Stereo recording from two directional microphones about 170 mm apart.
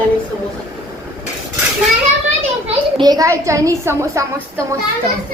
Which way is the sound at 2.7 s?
25° right (ahead or behind).